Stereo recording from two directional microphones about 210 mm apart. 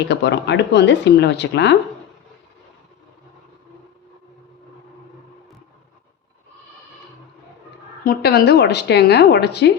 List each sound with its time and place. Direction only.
0.1 s speech: 55° left (ahead or behind)
8.0 s speech: 50° left (ahead or behind)